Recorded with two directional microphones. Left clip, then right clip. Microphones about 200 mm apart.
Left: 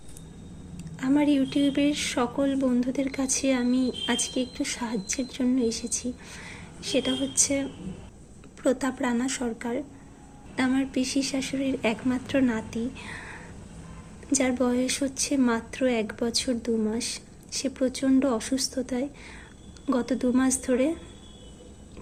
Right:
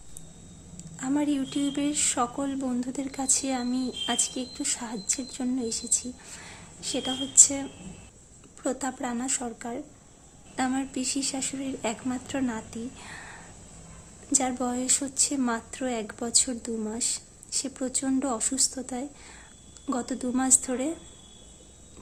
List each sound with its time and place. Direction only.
0.8 s speech: 15° right (ahead or behind)